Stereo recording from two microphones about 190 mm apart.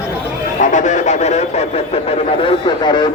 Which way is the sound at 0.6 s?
40° left (ahead or behind).